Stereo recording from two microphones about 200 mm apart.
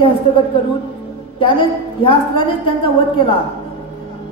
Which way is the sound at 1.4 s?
25° left (ahead or behind).